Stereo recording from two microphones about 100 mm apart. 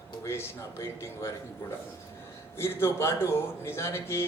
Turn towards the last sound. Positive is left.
turn(degrees=25)  # may be behind; listen again after turning